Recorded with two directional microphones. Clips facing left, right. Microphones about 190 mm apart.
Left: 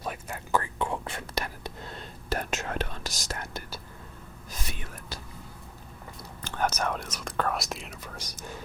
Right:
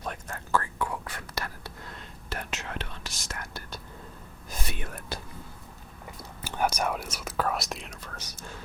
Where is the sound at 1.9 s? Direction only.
35° left (ahead or behind).